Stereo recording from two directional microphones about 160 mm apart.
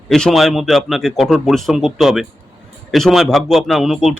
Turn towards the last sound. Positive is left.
turn(degrees=0)  # may be behind; listen again after turning